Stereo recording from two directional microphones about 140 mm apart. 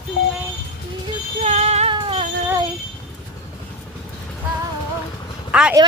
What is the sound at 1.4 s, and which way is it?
Female singing, 50° right (ahead or behind).